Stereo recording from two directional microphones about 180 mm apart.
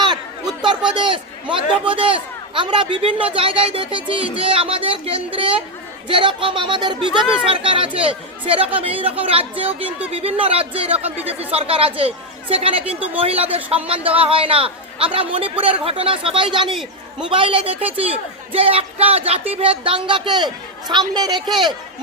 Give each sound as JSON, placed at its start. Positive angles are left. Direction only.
{"t": 0.9, "sound": "a man's voice", "side_deg": -25}
{"t": 16.7, "sound": "a man's voice", "side_deg": -5}
{"t": 17.3, "sound": "a man's voice", "side_deg": -30}